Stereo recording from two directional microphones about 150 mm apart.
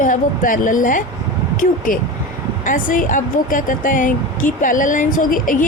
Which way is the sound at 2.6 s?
60° left (ahead or behind).